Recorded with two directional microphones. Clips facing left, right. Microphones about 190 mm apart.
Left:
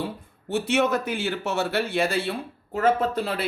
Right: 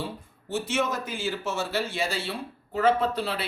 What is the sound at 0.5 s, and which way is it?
A man's voice, 65° left (ahead or behind).